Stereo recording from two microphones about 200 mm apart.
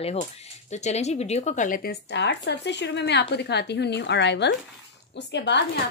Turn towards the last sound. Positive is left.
turn(degrees=60)  # may be behind; listen again after turning